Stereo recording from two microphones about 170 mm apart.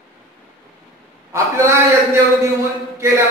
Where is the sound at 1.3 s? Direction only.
15° right (ahead or behind).